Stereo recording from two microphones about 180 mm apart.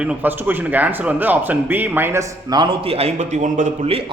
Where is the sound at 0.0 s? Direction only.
10° right (ahead or behind).